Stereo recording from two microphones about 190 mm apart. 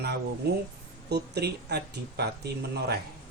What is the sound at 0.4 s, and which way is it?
Speech, 60° right (ahead or behind).